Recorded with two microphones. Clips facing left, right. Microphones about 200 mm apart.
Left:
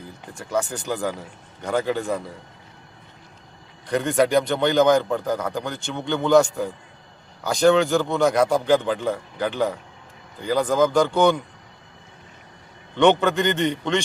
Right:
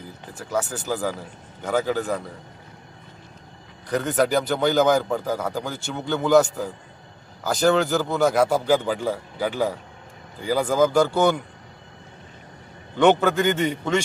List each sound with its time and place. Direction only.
0.3 s a man's voice: 5° right (ahead or behind)
3.8 s a man's voice: centre (ahead or behind)
13.0 s a man's voice: 5° right (ahead or behind)